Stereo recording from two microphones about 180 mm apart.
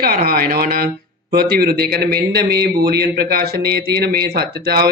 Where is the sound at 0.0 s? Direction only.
55° right (ahead or behind).